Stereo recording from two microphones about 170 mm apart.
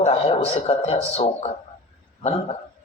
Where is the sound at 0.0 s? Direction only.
40° left (ahead or behind).